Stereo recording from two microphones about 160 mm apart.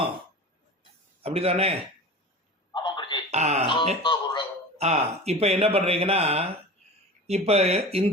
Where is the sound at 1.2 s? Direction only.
40° right (ahead or behind).